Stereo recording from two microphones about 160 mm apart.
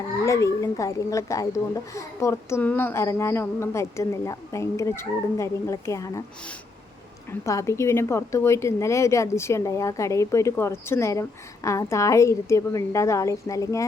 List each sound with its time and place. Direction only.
0.3 s a woman's voice: 20° left (ahead or behind)
7.3 s a woman's voice: 20° left (ahead or behind)